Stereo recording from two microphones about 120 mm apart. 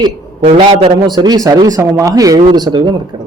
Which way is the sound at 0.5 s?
50° right (ahead or behind).